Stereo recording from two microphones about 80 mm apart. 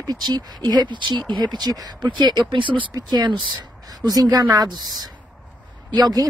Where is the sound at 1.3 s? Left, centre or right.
Right.